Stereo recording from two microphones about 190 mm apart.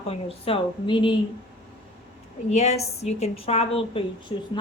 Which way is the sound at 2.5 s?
35° left (ahead or behind).